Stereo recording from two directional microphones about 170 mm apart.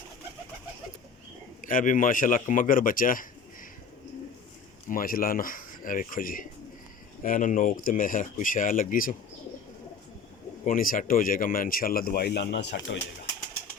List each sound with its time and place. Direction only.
1.6 s speech: 50° left (ahead or behind)
4.9 s speech: 55° left (ahead or behind)
10.7 s speech: 55° left (ahead or behind); by 13.0 s 90° left